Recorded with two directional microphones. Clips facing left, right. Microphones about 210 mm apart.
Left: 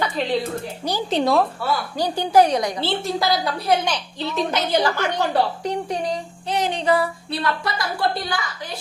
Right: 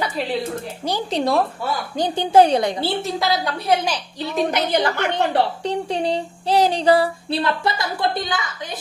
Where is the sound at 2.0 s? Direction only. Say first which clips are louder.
Right 2 dB; 20° right (ahead or behind).